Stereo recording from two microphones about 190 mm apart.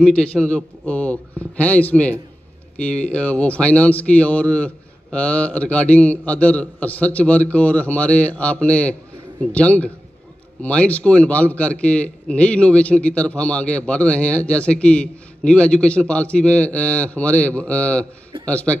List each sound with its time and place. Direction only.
0.0 s a man's voice: 5° left (ahead or behind)